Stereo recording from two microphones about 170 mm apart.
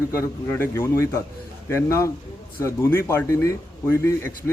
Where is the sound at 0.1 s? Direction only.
15° left (ahead or behind).